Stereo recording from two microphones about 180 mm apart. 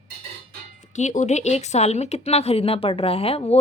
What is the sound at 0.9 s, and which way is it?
Speech, 40° left (ahead or behind).